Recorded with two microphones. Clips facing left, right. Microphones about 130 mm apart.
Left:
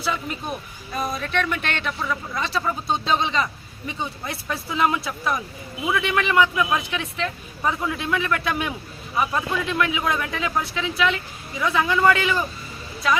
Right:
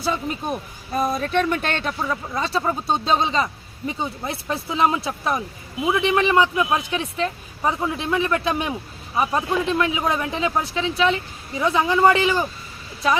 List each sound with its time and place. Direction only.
0.0 s speech: 35° right (ahead or behind)
2.9 s speech: 40° right (ahead or behind)